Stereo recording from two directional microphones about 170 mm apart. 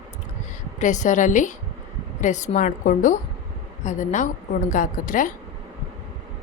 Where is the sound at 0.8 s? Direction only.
45° left (ahead or behind).